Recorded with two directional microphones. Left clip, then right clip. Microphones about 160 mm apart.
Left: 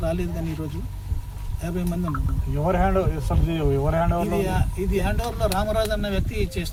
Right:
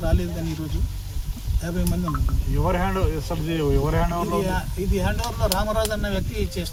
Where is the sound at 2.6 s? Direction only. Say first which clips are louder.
Left 2 dB; 70° left (ahead or behind).